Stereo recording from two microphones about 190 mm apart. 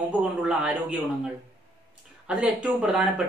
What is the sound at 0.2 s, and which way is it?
Speech, 5° right (ahead or behind).